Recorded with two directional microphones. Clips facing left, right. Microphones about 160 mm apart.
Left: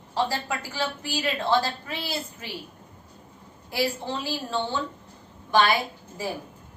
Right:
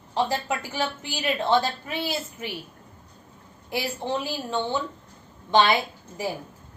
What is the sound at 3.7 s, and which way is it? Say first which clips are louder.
Speech: left 3 dB; 20° right (ahead or behind).